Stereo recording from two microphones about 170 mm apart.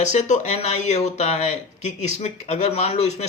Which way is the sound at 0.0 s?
45° left (ahead or behind).